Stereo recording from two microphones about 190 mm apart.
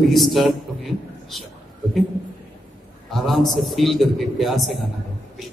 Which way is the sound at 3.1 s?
Centre (ahead or behind).